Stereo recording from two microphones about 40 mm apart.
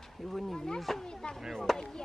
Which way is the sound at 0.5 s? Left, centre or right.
Centre.